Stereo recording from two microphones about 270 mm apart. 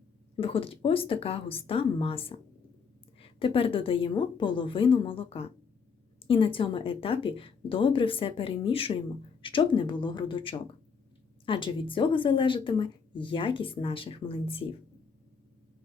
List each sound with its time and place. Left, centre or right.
0.3 s a woman's voice: centre